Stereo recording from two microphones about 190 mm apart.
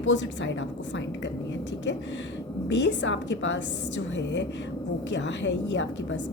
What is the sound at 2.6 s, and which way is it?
A woman's voice, 70° left (ahead or behind).